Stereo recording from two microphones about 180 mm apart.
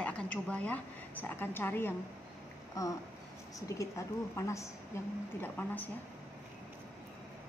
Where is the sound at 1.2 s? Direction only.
10° left (ahead or behind).